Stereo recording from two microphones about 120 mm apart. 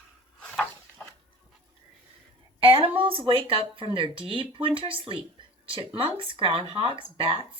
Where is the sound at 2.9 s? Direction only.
50° right (ahead or behind).